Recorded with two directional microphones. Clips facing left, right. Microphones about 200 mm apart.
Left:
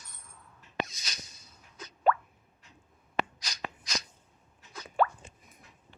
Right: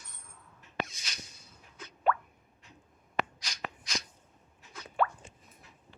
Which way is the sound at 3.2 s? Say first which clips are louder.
Left 1 dB; 40° left (ahead or behind).